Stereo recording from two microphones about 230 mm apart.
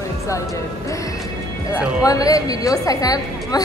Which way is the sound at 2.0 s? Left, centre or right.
Centre.